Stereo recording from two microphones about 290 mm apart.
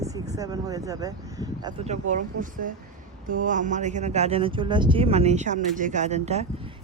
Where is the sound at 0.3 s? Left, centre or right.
Centre.